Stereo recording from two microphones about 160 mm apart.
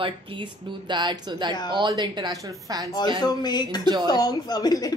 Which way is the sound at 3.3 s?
25° left (ahead or behind).